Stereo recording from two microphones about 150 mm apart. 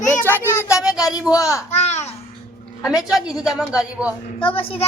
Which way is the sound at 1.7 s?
45° left (ahead or behind).